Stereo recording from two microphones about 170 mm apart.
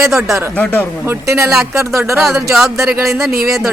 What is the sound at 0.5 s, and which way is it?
Speech, 10° left (ahead or behind).